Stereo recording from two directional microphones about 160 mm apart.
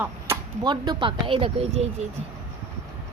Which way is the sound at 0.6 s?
30° right (ahead or behind).